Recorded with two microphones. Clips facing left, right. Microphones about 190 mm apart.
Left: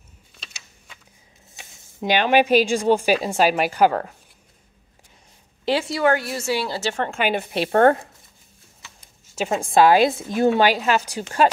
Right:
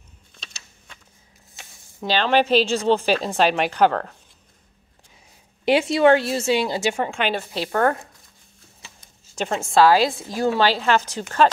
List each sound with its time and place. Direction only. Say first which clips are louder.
0.3 s a sound: even; 5° left (ahead or behind)
1.6 s speech: left 3 dB; 20° left (ahead or behind)
5.7 s a woman's voice: right 4 dB; 20° right (ahead or behind)
7.1 s speech: left 1 dB; 5° left (ahead or behind)
7.3 s a woman's voice: left 4 dB; 25° left (ahead or behind)
9.3 s speech: left 1 dB; 5° left (ahead or behind)